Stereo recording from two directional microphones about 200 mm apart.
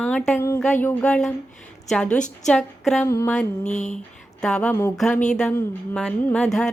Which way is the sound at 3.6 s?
35° left (ahead or behind).